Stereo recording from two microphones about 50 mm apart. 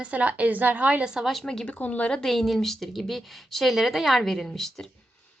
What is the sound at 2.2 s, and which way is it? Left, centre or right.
A woman's voice, centre.